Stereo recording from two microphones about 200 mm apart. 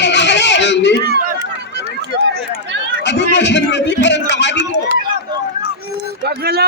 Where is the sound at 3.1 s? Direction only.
60° left (ahead or behind).